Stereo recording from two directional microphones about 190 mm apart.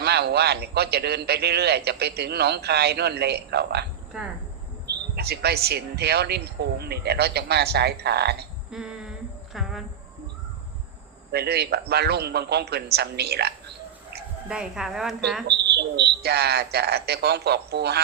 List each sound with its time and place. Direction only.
0.0 s a man's voice: 60° right (ahead or behind)
4.9 s a man's voice: 60° right (ahead or behind)
8.7 s humming: 5° right (ahead or behind)
11.3 s a man's voice: 60° right (ahead or behind)
14.5 s a woman's voice: 5° right (ahead or behind)
15.4 s a man's voice: 60° right (ahead or behind)